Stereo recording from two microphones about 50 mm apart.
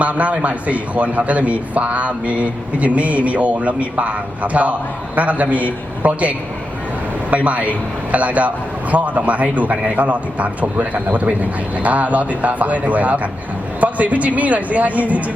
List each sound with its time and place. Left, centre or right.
0.0 s a man's voice: right